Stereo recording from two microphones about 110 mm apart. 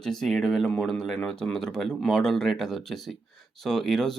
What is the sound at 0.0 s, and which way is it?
Speech, 5° left (ahead or behind).